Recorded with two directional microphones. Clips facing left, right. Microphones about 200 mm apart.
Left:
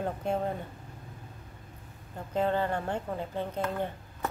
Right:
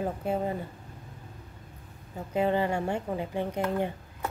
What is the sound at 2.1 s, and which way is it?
Speech, 10° right (ahead or behind).